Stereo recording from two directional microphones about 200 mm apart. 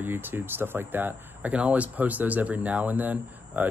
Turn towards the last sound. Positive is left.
turn(degrees=-10)  # may be behind; listen again after turning